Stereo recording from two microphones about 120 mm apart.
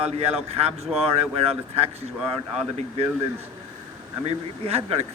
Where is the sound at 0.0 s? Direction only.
60° right (ahead or behind).